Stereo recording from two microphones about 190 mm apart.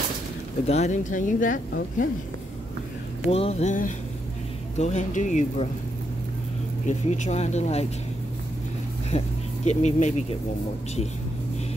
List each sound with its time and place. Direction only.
0.7 s speech: 35° left (ahead or behind)
3.3 s speech: 35° left (ahead or behind)
6.9 s speech: 35° left (ahead or behind)
9.1 s speech: 40° left (ahead or behind)